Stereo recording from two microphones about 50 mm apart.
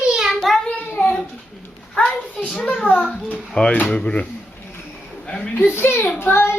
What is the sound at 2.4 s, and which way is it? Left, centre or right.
Speech, left.